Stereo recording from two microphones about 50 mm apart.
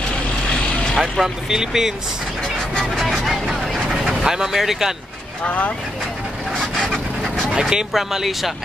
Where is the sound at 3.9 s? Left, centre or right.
Centre.